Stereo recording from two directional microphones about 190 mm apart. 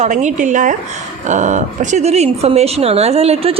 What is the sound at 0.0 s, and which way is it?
A woman's voice, 40° right (ahead or behind).